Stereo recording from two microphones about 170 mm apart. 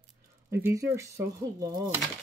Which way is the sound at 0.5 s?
15° right (ahead or behind).